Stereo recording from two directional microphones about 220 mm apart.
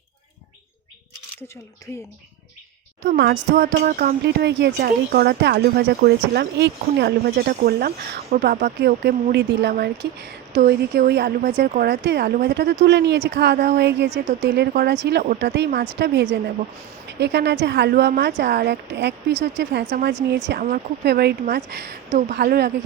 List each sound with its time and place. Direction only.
3.1 s a woman's voice: 55° right (ahead or behind)